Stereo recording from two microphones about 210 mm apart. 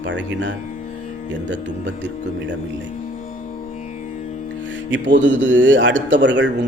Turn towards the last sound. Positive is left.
turn(degrees=-60)  # may be behind; listen again after turning